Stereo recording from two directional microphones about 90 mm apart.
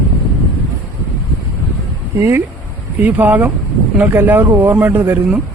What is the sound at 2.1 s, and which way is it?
Speech, 25° right (ahead or behind).